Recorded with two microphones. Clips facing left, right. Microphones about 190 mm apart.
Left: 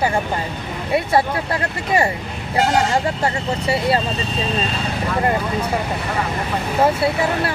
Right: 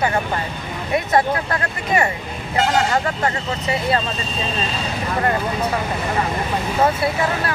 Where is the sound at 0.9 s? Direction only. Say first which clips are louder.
Even; 30° left (ahead or behind).